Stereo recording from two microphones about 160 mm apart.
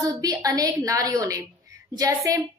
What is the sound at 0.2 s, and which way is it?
A woman's voice, 20° right (ahead or behind).